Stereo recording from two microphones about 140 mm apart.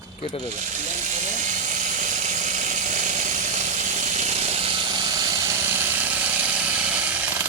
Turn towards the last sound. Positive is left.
turn(degrees=-10)  # may be behind; listen again after turning